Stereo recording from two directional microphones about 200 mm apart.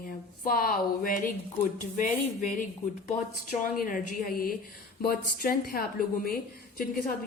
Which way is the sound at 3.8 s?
45° left (ahead or behind).